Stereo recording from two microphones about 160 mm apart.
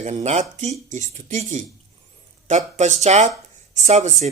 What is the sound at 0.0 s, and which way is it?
Speech, 45° right (ahead or behind).